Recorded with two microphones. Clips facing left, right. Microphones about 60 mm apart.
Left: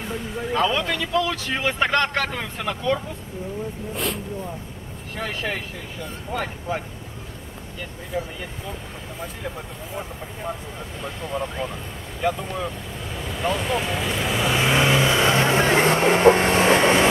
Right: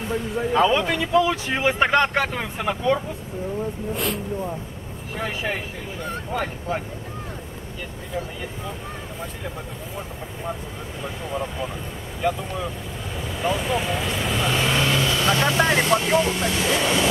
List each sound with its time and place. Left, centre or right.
0.1 s speech: centre
3.9 s speech: centre
11.0 s speech: centre; by 17.1 s left